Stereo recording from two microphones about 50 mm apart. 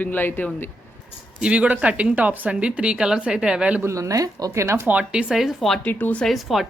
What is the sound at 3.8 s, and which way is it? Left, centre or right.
Speech, right.